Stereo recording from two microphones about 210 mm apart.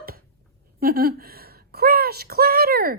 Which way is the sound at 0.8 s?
45° right (ahead or behind).